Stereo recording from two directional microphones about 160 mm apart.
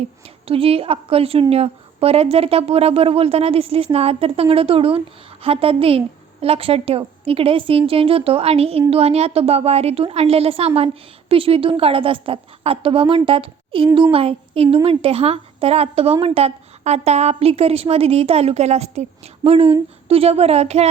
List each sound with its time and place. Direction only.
0.4 s a woman's voice: 35° right (ahead or behind)